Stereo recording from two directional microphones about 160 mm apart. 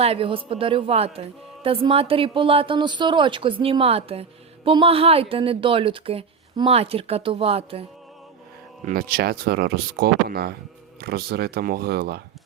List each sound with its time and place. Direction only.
0.0 s a woman's voice: 35° right (ahead or behind)
8.8 s speech: 60° right (ahead or behind)